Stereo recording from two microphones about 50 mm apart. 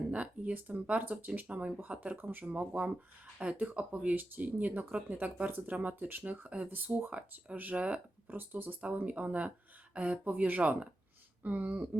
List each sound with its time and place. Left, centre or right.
0.1 s speech: right
2.1 s speech: right
2.4 s speech: right
7.5 s speech: right
8.3 s speech: right